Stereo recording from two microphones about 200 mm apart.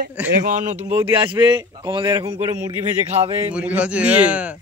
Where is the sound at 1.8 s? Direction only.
20° right (ahead or behind).